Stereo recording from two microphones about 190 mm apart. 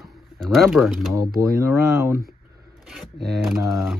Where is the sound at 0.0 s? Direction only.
Centre (ahead or behind).